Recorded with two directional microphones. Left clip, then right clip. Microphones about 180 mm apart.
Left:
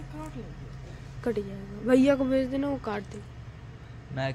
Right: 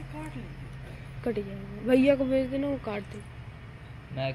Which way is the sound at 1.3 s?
10° left (ahead or behind).